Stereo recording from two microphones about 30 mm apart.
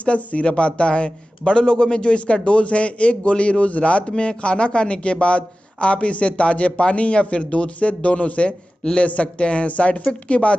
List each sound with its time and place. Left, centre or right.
0.0 s speech: left